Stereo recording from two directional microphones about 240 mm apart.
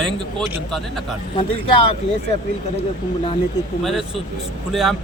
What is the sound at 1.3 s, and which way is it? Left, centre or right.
Speech, left.